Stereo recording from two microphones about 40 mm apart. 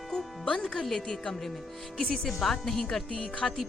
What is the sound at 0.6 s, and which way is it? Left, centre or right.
A woman's voice, centre.